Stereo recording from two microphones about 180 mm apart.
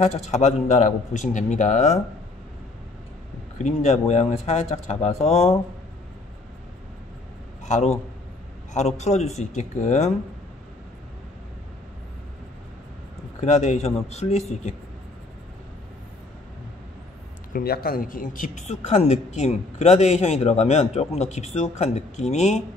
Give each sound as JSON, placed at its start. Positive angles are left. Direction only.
{"t": 0.0, "sound": "a woman's voice", "side_deg": 40}
{"t": 3.5, "sound": "a woman's voice", "side_deg": 40}
{"t": 7.6, "sound": "a woman's voice", "side_deg": 40}
{"t": 13.4, "sound": "a woman's voice", "side_deg": 40}
{"t": 17.5, "sound": "a woman's voice", "side_deg": 55}